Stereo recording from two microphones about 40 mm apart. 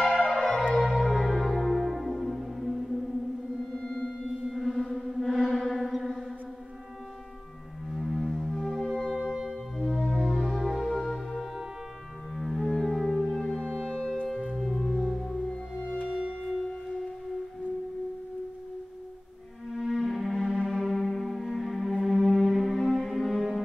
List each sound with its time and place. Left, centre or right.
0.0 s music: centre
0.4 s music: centre
3.7 s music: centre
4.2 s music: centre
5.6 s a sound: centre
8.1 s music: centre
9.1 s music: centre
9.8 s music: centre
13.6 s music: left
14.6 s music: centre
19.7 s cello: centre
22.0 s music: centre